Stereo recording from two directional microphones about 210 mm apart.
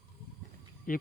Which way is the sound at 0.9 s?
40° left (ahead or behind).